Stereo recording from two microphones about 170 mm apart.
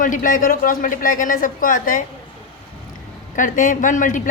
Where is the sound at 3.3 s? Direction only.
50° left (ahead or behind).